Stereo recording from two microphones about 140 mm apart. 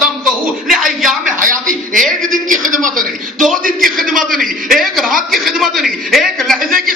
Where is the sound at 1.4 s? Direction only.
75° right (ahead or behind).